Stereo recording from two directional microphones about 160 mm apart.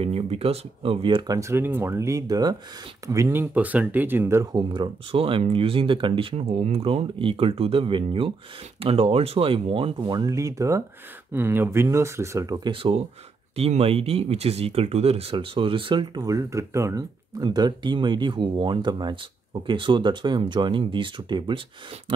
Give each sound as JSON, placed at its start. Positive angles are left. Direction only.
{"t": 0.0, "sound": "speech", "side_deg": -40}